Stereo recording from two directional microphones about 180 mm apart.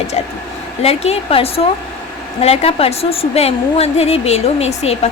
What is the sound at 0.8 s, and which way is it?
Speech, 35° left (ahead or behind).